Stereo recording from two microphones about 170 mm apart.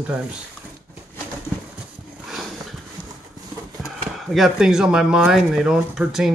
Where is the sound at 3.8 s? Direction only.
Centre (ahead or behind).